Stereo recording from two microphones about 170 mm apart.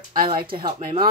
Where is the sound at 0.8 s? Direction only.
30° right (ahead or behind).